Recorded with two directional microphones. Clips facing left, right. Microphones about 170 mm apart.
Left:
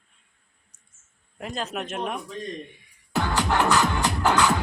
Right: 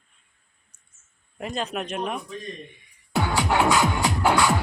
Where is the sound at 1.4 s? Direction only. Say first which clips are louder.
Right 2 dB; centre (ahead or behind).